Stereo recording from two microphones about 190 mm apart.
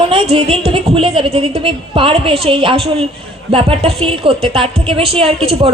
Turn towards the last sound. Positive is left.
turn(degrees=-30)  # may be behind; listen again after turning